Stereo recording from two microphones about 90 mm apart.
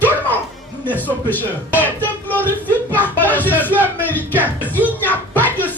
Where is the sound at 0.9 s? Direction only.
20° left (ahead or behind).